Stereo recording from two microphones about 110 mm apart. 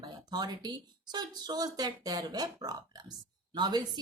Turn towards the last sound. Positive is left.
turn(degrees=-40)  # may be behind; listen again after turning